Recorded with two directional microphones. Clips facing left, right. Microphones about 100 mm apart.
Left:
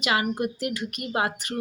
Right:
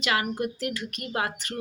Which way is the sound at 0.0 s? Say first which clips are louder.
Left 2 dB; 20° left (ahead or behind).